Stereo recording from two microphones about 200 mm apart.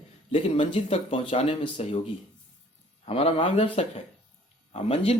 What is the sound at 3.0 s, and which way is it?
Speech, 30° left (ahead or behind).